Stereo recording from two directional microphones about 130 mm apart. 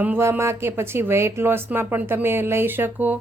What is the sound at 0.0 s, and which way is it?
A woman's voice, 15° right (ahead or behind).